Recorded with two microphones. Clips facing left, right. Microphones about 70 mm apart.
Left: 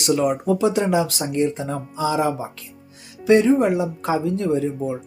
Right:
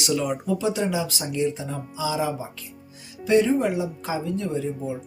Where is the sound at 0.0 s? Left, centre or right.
Left.